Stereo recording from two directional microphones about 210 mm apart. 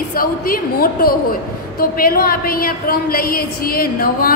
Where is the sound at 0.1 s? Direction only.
45° left (ahead or behind).